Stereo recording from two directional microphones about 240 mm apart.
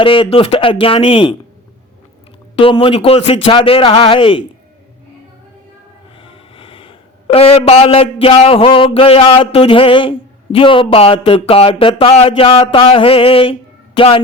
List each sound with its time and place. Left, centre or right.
0.0 s a man's voice: left
2.6 s a man's voice: left
6.1 s speech: left